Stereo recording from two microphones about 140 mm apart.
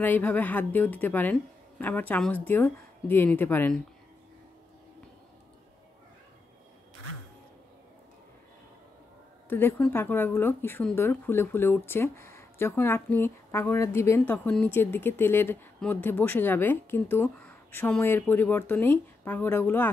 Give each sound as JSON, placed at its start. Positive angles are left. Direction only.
{"t": 0.0, "sound": "speech", "side_deg": 10}
{"t": 9.5, "sound": "speech", "side_deg": 15}